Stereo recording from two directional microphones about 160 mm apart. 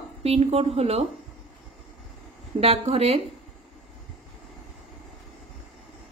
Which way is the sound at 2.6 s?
40° right (ahead or behind).